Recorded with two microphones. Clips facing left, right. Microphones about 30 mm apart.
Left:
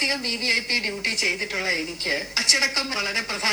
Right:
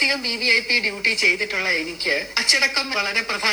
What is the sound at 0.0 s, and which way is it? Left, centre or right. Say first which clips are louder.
A woman's voice: right 4 dB; right.